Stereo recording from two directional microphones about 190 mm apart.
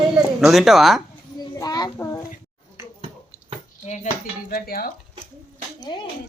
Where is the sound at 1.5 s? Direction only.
20° left (ahead or behind).